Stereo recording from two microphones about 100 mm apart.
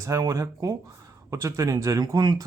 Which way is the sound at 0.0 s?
35° right (ahead or behind).